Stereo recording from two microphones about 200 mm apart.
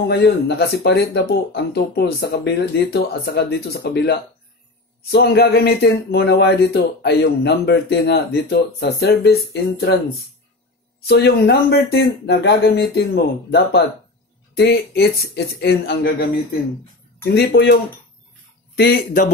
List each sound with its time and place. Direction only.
0.1 s speech: 55° left (ahead or behind)
11.1 s speech: 55° left (ahead or behind)
18.8 s speech: 50° left (ahead or behind)